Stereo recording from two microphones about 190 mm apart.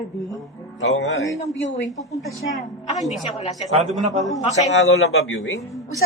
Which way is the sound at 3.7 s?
35° right (ahead or behind).